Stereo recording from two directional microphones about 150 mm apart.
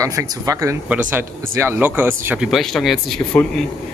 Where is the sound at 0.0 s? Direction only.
20° right (ahead or behind); by 3.2 s centre (ahead or behind).